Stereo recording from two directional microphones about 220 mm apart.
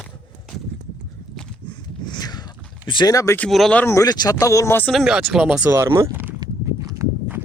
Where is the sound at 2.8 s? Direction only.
20° left (ahead or behind).